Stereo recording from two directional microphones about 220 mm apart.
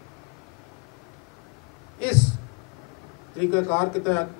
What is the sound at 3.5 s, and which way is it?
Speech, 15° left (ahead or behind).